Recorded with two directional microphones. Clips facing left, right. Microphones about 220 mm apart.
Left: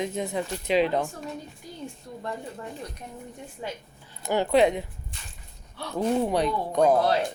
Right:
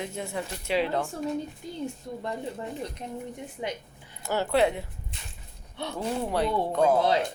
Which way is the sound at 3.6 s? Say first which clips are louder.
Right 2 dB; 20° right (ahead or behind).